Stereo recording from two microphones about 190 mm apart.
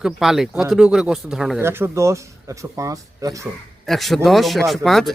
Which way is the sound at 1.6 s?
15° right (ahead or behind).